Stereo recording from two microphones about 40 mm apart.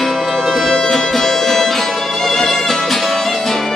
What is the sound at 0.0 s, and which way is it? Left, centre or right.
Music, centre.